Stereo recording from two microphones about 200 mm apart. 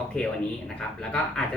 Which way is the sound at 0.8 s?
5° left (ahead or behind).